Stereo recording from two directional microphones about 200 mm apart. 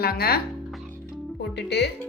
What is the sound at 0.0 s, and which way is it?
Speech, 50° left (ahead or behind).